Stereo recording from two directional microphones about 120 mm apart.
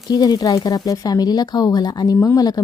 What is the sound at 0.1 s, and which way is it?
Speech, 30° left (ahead or behind).